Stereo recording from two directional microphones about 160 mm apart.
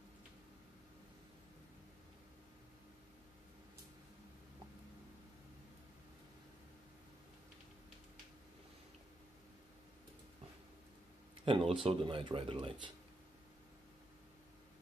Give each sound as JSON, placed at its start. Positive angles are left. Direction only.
{"t": 11.4, "sound": "speech", "side_deg": -35}